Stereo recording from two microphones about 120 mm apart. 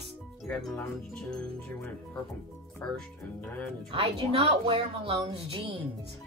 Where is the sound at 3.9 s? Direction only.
55° right (ahead or behind).